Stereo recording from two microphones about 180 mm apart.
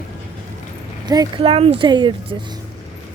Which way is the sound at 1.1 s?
25° right (ahead or behind).